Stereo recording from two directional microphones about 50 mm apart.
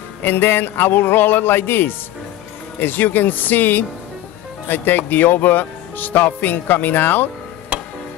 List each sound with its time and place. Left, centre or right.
0.2 s speech: left